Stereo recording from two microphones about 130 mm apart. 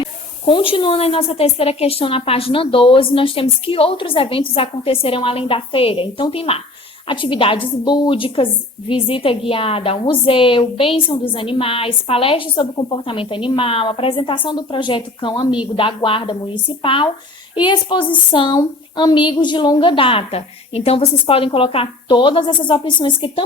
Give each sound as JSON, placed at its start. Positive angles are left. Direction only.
{"t": 0.0, "sound": "a woman's voice", "side_deg": 40}